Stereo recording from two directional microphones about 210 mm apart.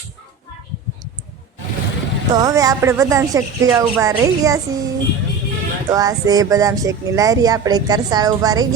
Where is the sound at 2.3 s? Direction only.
15° right (ahead or behind).